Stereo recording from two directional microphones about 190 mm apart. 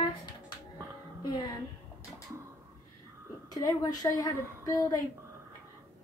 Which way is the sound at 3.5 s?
20° left (ahead or behind).